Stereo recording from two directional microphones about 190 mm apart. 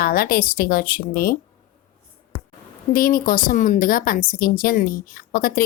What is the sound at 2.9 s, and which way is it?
Speech, 50° left (ahead or behind).